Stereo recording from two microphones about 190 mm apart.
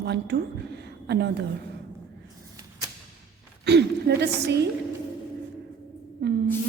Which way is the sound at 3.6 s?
60° right (ahead or behind).